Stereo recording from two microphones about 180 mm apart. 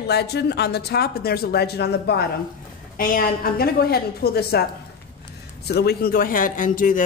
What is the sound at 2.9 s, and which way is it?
A man's voice, 50° left (ahead or behind).